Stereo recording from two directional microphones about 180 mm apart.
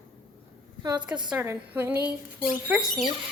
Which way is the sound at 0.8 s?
20° right (ahead or behind).